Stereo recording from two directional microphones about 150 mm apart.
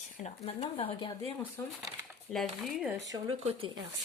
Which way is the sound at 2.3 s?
Centre (ahead or behind).